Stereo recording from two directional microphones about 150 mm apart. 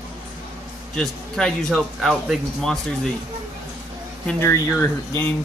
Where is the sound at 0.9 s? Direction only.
5° left (ahead or behind).